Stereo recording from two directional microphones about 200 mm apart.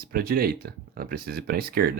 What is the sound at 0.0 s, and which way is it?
Speech, 50° right (ahead or behind).